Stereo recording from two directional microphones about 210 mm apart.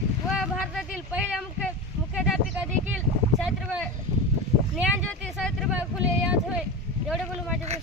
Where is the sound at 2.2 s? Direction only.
5° right (ahead or behind).